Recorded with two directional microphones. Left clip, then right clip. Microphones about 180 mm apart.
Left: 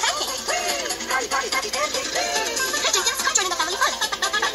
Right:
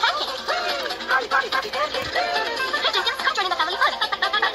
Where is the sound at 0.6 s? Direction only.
25° left (ahead or behind).